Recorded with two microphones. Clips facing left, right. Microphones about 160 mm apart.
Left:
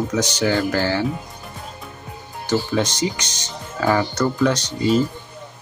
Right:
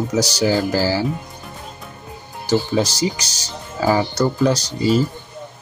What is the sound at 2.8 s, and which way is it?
Speech, 35° right (ahead or behind).